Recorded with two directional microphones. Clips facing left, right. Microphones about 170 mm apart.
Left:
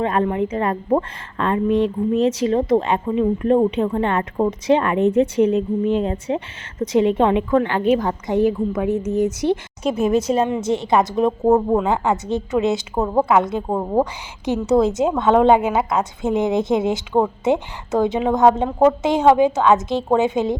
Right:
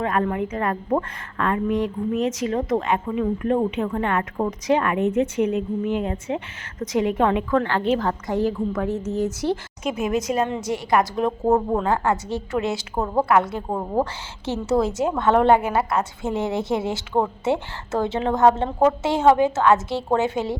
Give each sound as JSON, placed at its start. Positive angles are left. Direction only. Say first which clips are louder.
{"t": 0.0, "sound": "a woman's voice", "louder": "left 3 dB", "side_deg": 25}
{"t": 9.8, "sound": "a woman's voice", "louder": "left 5 dB", "side_deg": 30}